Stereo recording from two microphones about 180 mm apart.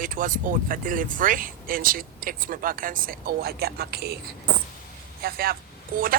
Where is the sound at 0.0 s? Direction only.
50° right (ahead or behind).